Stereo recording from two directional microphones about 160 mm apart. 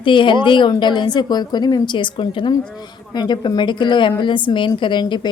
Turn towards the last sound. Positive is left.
turn(degrees=30)  # may be behind; listen again after turning